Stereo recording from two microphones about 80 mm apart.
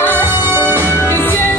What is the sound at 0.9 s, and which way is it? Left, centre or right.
Music, left.